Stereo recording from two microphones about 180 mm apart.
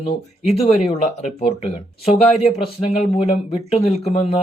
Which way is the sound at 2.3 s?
35° left (ahead or behind).